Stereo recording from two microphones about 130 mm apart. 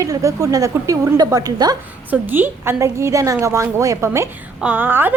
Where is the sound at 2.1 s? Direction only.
15° right (ahead or behind).